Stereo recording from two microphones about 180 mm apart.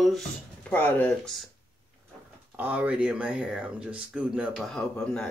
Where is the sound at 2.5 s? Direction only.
10° right (ahead or behind).